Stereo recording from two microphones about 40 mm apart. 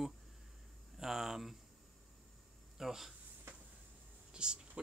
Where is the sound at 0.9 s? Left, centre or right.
Centre.